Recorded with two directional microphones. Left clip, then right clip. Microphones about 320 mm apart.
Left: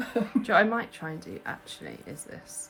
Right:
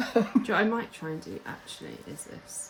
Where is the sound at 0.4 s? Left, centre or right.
Centre.